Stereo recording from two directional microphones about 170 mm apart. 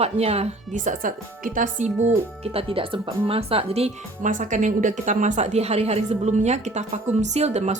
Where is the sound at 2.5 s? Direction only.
30° right (ahead or behind).